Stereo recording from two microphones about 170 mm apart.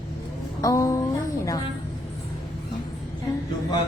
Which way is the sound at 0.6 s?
20° left (ahead or behind).